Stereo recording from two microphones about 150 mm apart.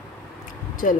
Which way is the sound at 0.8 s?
65° left (ahead or behind).